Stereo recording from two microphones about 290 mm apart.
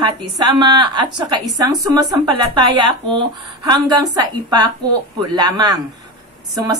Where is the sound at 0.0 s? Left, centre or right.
Centre.